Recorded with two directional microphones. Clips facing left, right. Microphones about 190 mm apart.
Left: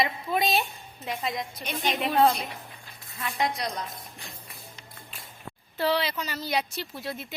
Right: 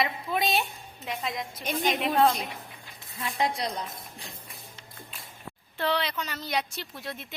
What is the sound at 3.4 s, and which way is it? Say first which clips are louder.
Speech: even; 30° right (ahead or behind).